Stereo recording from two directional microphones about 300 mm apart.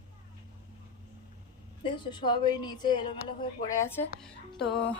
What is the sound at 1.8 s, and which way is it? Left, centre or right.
A woman's voice, centre.